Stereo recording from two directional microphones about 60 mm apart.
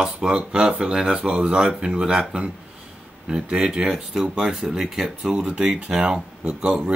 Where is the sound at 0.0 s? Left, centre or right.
Centre.